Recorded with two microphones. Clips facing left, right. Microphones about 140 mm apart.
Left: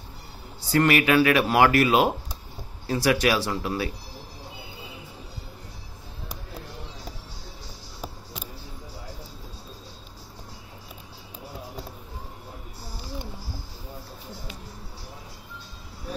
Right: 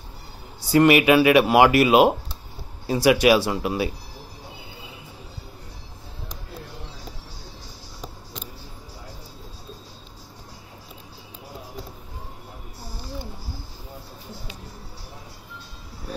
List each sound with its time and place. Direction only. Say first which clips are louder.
0.7 s speech: right 5 dB; 15° right (ahead or behind)